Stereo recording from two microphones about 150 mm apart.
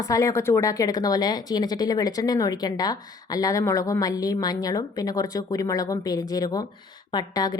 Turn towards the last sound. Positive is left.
turn(degrees=25)  # may be behind; listen again after turning